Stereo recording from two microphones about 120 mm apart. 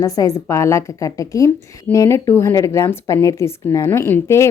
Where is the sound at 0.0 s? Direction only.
25° left (ahead or behind).